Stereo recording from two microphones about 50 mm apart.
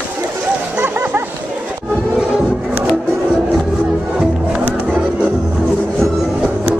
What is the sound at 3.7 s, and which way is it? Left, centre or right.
Music, centre.